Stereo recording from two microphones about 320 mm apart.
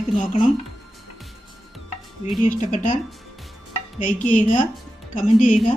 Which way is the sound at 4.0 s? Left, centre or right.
Left.